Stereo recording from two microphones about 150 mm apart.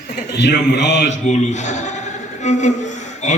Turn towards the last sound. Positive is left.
turn(degrees=50)  # may be behind; listen again after turning